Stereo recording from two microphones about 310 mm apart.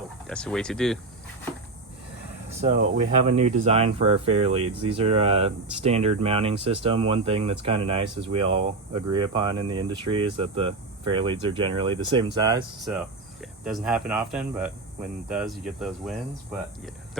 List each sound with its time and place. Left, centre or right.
0.3 s speech: centre
2.6 s speech: right
13.4 s speech: centre